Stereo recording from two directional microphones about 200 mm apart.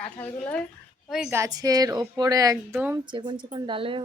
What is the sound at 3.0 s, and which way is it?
Speech, 20° right (ahead or behind).